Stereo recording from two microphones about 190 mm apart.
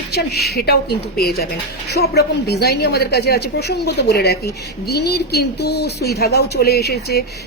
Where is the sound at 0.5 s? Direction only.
60° left (ahead or behind).